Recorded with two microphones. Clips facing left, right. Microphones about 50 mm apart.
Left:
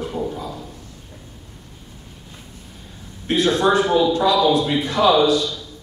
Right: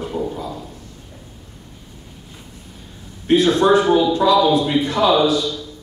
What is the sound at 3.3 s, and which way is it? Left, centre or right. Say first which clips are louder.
Speech: right 3 dB; centre.